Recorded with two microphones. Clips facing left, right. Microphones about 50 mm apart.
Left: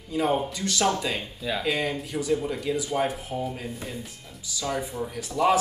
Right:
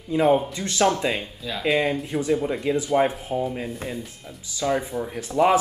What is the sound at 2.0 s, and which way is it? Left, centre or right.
Speech, right.